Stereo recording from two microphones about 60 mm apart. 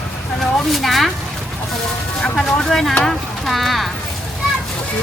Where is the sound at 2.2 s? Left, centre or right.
Centre.